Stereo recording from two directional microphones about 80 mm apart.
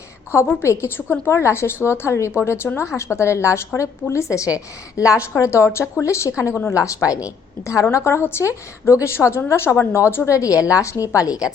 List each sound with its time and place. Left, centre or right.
0.3 s a woman's voice: left